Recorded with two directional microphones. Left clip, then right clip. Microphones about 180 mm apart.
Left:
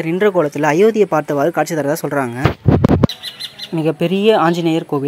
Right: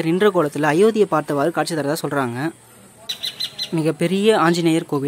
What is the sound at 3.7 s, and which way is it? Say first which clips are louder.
Speech: left 4 dB; centre (ahead or behind).